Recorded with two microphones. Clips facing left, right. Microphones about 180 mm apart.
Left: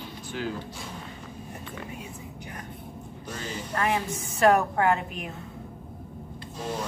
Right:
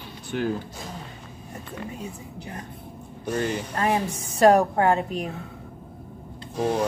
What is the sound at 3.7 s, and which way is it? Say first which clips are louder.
A woman's voice: left 1 dB; 35° right (ahead or behind).